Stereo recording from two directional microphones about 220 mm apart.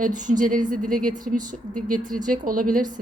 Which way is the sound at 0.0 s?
35° right (ahead or behind).